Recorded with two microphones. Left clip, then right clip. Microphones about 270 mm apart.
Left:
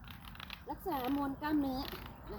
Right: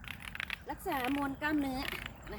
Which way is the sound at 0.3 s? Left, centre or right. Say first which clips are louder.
Right 4 dB; centre.